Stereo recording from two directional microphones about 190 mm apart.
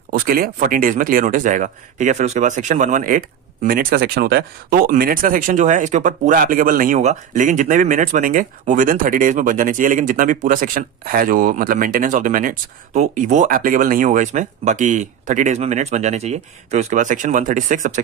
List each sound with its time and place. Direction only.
0.1 s speech: 50° right (ahead or behind)